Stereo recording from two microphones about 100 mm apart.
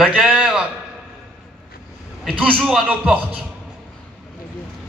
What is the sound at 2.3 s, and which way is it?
Speech, 5° right (ahead or behind).